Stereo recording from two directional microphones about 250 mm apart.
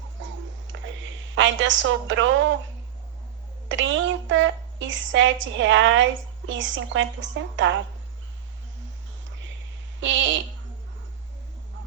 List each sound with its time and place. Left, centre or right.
0.2 s a sound: right
0.7 s sniff: right
1.4 s a woman's voice: right
3.7 s a woman's voice: right
10.0 s a woman's voice: right